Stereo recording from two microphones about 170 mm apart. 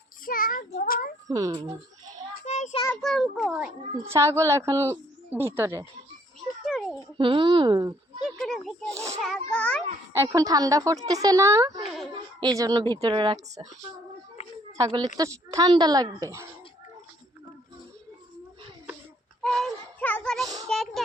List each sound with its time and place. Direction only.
0.3 s child singing: 55° left (ahead or behind)
1.3 s a woman's voice: 20° right (ahead or behind)
2.4 s child singing: 40° left (ahead or behind)
3.0 s a child's voice: centre (ahead or behind); by 5.8 s 15° right (ahead or behind)
6.7 s a sound: centre (ahead or behind)
7.2 s a woman's voice: 30° right (ahead or behind)
8.2 s speech: centre (ahead or behind)
8.9 s a woman's voice: 20° right (ahead or behind)
9.2 s speech: 5° left (ahead or behind)
10.1 s a woman's voice: 15° right (ahead or behind)
14.9 s a woman's voice: 20° right (ahead or behind)
19.4 s synthetic singing: 5° left (ahead or behind)
20.7 s a sound: centre (ahead or behind)